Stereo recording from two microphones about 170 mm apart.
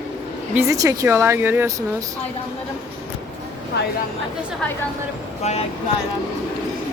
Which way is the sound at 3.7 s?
75° left (ahead or behind).